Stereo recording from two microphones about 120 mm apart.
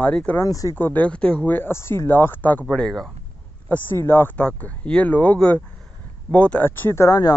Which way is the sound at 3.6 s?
15° left (ahead or behind).